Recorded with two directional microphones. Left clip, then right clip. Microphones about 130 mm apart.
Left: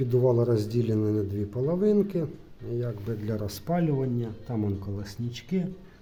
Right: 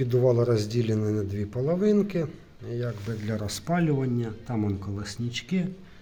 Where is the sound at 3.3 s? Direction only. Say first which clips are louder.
Right 1 dB; 15° left (ahead or behind).